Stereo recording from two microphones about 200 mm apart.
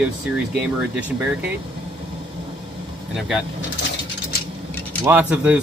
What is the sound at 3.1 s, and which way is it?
Speech, centre (ahead or behind).